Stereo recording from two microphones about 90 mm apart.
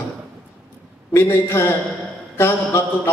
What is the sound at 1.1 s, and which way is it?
A man's voice, 30° left (ahead or behind).